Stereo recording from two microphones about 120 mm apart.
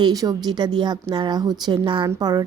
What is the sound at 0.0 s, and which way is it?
A woman's voice, 30° right (ahead or behind).